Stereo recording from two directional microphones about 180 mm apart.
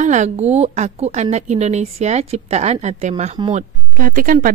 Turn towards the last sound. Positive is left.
turn(degrees=-50)  # may be behind; listen again after turning